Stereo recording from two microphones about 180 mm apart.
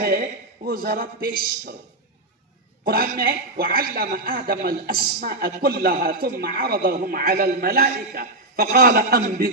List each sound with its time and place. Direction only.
0.0 s speech: 55° right (ahead or behind)
2.8 s a man's voice: 55° right (ahead or behind)